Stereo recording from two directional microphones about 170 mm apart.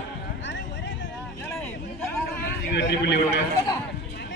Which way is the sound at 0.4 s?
90° left.